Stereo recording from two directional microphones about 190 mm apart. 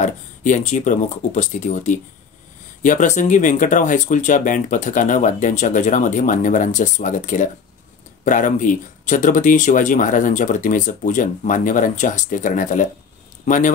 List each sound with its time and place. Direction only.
0.0 s speech: 40° left (ahead or behind)